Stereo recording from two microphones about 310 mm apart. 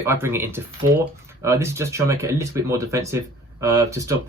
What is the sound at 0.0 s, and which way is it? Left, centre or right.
Speech, centre.